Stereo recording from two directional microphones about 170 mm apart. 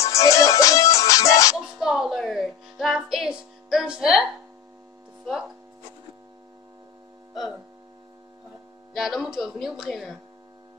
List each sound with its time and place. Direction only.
0.0 s music: 20° left (ahead or behind)
1.8 s a woman's voice: centre (ahead or behind)
8.9 s a woman's voice: centre (ahead or behind)